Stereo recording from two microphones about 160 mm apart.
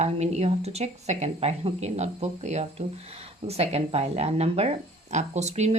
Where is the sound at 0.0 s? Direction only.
45° right (ahead or behind).